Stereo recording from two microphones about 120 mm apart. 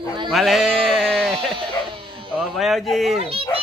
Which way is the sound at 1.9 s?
45° right (ahead or behind).